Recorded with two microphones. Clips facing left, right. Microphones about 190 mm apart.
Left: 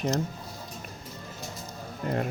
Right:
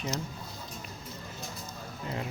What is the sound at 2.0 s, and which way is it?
Speech, 55° left (ahead or behind).